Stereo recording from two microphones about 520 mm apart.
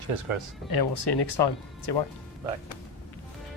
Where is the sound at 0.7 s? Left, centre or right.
Left.